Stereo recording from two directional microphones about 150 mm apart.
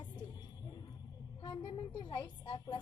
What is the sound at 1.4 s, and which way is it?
A woman's voice, 35° left (ahead or behind).